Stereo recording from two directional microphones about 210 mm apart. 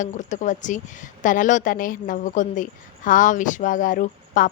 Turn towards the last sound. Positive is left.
turn(degrees=40)  # may be behind; listen again after turning